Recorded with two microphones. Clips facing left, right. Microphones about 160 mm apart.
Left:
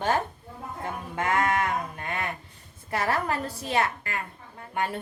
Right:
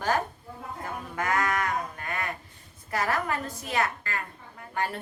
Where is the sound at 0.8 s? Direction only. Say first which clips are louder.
Left 2 dB; 25° left (ahead or behind).